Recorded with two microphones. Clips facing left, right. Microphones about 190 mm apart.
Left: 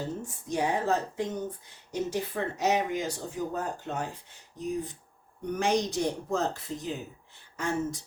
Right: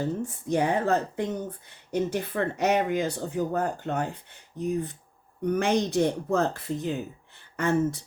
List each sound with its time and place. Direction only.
0.4 s speech: 55° right (ahead or behind)